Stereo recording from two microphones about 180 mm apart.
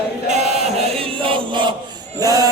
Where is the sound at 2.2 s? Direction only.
20° right (ahead or behind).